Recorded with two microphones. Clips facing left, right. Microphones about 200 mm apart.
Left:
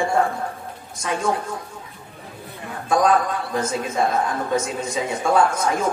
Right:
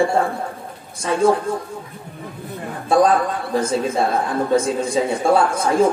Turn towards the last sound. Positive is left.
turn(degrees=-30)  # may be behind; listen again after turning